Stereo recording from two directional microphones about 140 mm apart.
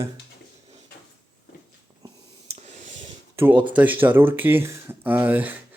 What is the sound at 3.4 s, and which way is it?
Speech, 10° right (ahead or behind).